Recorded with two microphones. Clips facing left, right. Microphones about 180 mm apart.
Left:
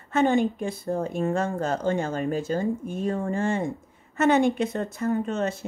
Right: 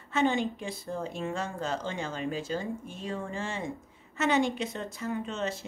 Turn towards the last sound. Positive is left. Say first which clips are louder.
# left 7 dB
turn(degrees=50)  # may be behind; listen again after turning